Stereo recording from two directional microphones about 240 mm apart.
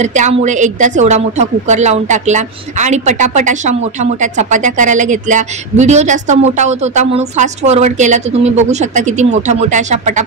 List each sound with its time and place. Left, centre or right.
0.0 s a woman's voice: right